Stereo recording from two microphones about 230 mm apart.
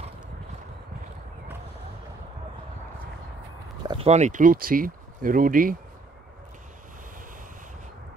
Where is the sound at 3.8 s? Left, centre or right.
Right.